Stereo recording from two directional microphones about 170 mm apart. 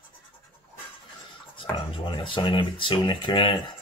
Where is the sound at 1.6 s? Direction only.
30° left (ahead or behind).